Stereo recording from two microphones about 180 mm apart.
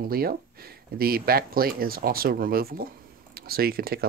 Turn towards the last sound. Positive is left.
turn(degrees=-55)  # may be behind; listen again after turning